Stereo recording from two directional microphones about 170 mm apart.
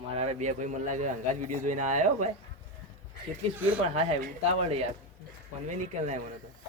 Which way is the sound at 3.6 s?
10° right (ahead or behind).